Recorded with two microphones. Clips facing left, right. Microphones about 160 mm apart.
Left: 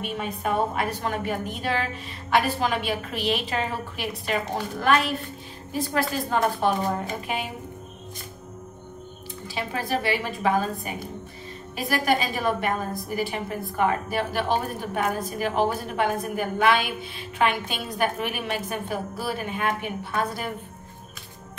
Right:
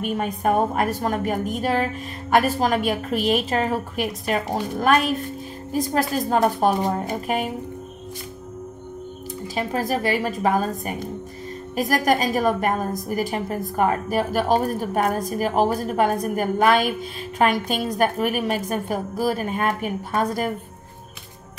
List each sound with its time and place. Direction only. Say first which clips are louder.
0.0 s a woman's voice: right 6 dB; 45° right (ahead or behind)
9.6 s a woman's voice: right 4 dB; 45° right (ahead or behind)